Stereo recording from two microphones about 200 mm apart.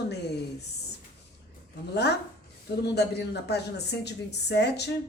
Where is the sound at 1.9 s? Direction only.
55° left (ahead or behind).